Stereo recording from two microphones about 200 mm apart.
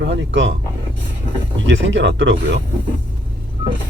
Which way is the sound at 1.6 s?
65° right (ahead or behind).